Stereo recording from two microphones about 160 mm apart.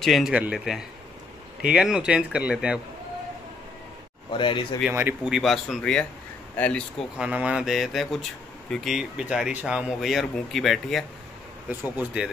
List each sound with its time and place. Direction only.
0.0 s speech: centre (ahead or behind)
4.3 s speech: 30° left (ahead or behind)
4.9 s speech: 15° right (ahead or behind)
5.3 s speech: centre (ahead or behind)
7.2 s speech: 5° right (ahead or behind)